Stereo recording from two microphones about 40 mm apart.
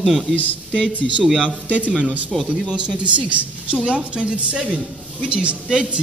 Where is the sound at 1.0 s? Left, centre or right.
Centre.